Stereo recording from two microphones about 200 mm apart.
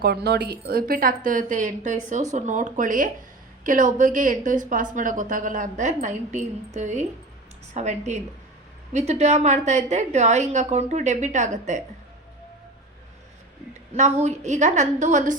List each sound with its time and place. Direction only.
0.0 s a woman's voice: 55° right (ahead or behind); by 11.8 s 35° right (ahead or behind)
13.9 s a woman's voice: 35° right (ahead or behind)